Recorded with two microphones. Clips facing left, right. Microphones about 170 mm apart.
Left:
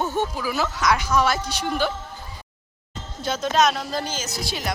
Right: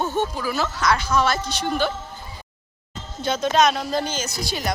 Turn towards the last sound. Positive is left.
turn(degrees=0)  # may be behind; listen again after turning